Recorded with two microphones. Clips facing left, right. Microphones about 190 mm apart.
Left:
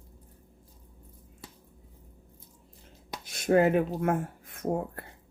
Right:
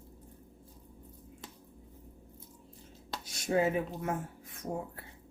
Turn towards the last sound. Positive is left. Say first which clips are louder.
# left 7 dB
turn(degrees=60)  # may be behind; listen again after turning